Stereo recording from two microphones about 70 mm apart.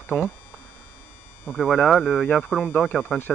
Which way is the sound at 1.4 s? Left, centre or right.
Centre.